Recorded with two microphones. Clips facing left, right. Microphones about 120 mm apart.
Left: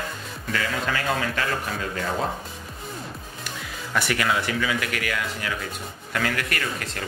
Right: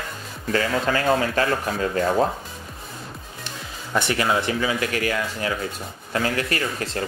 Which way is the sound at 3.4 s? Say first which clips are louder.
Left 1 dB; 25° right (ahead or behind).